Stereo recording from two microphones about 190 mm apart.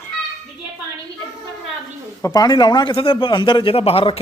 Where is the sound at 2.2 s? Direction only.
20° left (ahead or behind).